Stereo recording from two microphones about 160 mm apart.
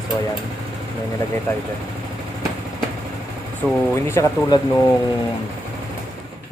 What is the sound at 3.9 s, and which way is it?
Speech, 15° left (ahead or behind).